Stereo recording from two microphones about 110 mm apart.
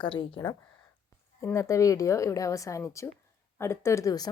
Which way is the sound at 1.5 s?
30° left (ahead or behind).